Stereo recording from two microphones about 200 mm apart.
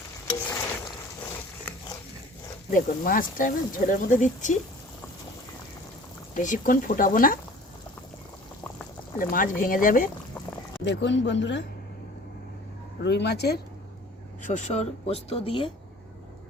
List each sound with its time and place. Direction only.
0.5 s a sound: 15° left (ahead or behind)
2.6 s speech: 45° left (ahead or behind)
6.3 s speech: 40° left (ahead or behind)
9.1 s speech: 45° left (ahead or behind)
10.8 s speech: 65° left (ahead or behind)
13.0 s speech: 60° left (ahead or behind)
14.4 s speech: 35° left (ahead or behind)